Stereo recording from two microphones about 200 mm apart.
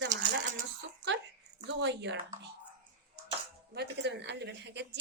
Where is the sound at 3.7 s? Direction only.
60° right (ahead or behind).